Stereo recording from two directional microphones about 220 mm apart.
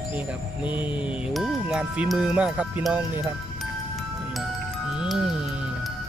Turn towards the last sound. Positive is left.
turn(degrees=-5)  # may be behind; listen again after turning